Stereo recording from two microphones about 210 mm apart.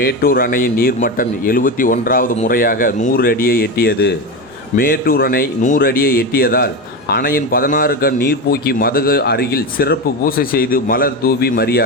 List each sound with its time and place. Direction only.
0.0 s a man's voice: 45° left (ahead or behind)